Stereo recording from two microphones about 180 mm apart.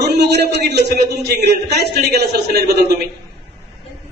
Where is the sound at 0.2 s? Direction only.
70° right (ahead or behind).